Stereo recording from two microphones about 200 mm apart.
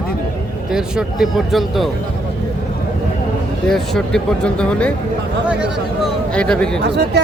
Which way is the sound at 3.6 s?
Centre (ahead or behind).